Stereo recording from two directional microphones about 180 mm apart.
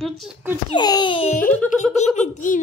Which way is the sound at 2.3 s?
45° left (ahead or behind).